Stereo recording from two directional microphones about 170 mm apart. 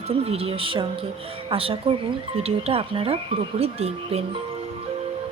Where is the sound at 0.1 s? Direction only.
35° right (ahead or behind).